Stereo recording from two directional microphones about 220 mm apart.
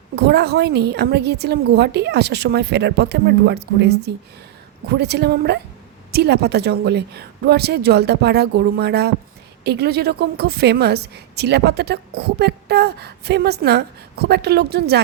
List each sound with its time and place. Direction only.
0.2 s a woman's voice: 50° right (ahead or behind)